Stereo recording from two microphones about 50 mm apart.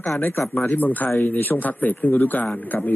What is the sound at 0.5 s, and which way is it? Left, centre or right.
Speech, left.